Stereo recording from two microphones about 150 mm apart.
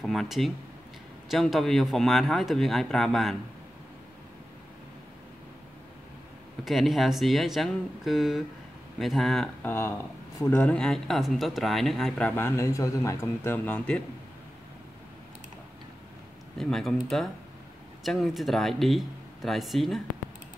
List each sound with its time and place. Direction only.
0.0 s a man's voice: centre (ahead or behind)
6.6 s a man's voice: centre (ahead or behind)
9.7 s speech: 15° left (ahead or behind)
16.5 s a man's voice: centre (ahead or behind)